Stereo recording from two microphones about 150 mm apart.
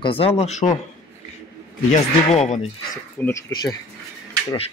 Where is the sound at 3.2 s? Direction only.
10° left (ahead or behind).